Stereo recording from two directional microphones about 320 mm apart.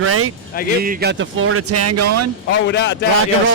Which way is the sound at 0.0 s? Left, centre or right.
Right.